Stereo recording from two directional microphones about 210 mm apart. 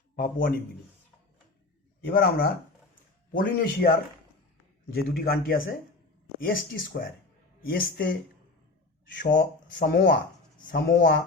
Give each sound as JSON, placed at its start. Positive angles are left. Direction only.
{"t": 0.2, "sound": "speech", "side_deg": 45}
{"t": 2.0, "sound": "speech", "side_deg": 45}
{"t": 4.9, "sound": "speech", "side_deg": 45}
{"t": 9.2, "sound": "speech", "side_deg": 45}